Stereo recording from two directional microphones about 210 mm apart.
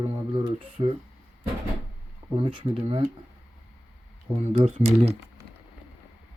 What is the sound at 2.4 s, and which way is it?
Speech, 25° right (ahead or behind).